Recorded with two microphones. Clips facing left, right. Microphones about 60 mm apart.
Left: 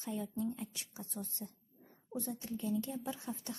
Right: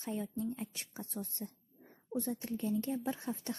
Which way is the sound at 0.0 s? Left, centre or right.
Right.